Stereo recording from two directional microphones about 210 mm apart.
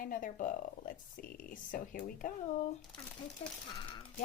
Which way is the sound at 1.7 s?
40° left (ahead or behind).